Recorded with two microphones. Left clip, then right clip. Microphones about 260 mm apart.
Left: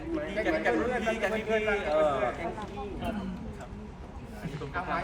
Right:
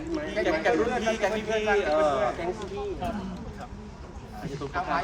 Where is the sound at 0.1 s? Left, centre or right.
Right.